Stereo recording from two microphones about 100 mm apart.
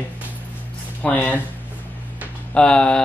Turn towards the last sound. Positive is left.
turn(degrees=10)  # may be behind; listen again after turning